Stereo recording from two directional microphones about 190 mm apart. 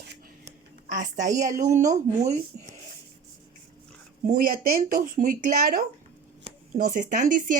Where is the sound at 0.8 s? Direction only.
40° right (ahead or behind).